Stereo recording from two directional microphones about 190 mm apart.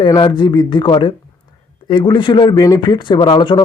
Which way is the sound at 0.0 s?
25° left (ahead or behind).